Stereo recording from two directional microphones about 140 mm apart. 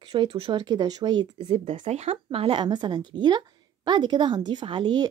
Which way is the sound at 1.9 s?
50° right (ahead or behind).